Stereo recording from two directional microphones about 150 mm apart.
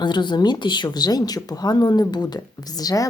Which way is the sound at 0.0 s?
30° left (ahead or behind).